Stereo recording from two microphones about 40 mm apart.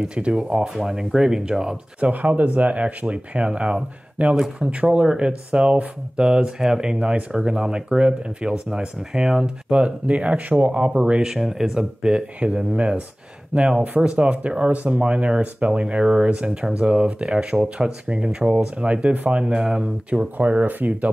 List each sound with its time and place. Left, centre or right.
0.0 s speech: right
2.0 s speech: right
4.9 s speech: right
9.8 s speech: right
11.2 s speech: centre
12.4 s speech: right
20.3 s speech: right